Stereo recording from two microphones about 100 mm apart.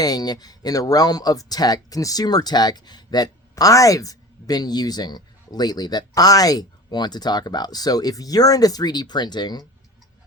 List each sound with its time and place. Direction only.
0.0 s speech: 40° left (ahead or behind)